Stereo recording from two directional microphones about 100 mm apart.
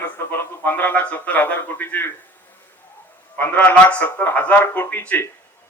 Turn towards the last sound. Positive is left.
turn(degrees=20)  # may be behind; listen again after turning